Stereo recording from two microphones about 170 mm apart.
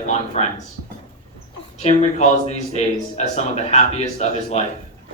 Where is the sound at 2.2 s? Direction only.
45° left (ahead or behind).